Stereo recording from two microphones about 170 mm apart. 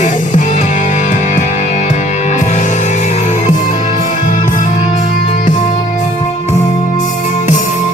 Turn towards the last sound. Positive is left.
turn(degrees=45)  # may be behind; listen again after turning